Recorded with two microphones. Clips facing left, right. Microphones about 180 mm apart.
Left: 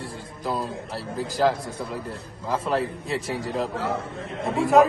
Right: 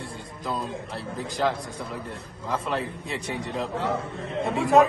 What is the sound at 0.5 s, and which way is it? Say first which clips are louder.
Speech: left 2 dB; 5° left (ahead or behind).